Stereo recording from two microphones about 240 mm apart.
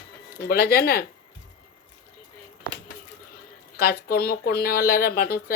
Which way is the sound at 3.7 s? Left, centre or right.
Left.